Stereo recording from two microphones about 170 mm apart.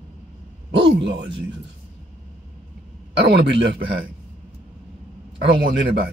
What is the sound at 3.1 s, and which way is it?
Speech, 90° right.